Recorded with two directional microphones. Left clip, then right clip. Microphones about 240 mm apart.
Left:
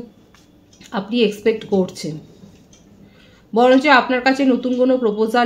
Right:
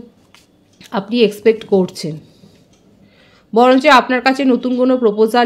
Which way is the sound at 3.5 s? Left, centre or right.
Right.